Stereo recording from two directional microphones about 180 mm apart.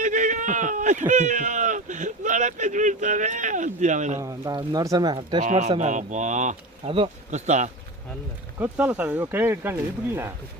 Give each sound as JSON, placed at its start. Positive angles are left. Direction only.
{"t": 0.0, "sound": "speech", "side_deg": -45}
{"t": 4.2, "sound": "speech", "side_deg": -20}
{"t": 5.4, "sound": "speech", "side_deg": -45}
{"t": 8.5, "sound": "speech", "side_deg": -10}